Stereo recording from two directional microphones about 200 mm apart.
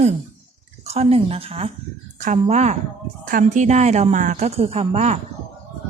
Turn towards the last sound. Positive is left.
turn(degrees=-30)  # may be behind; listen again after turning